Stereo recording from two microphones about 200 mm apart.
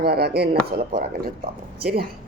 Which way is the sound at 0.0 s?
55° right (ahead or behind).